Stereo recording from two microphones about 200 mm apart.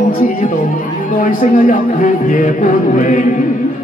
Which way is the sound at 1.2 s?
40° left (ahead or behind).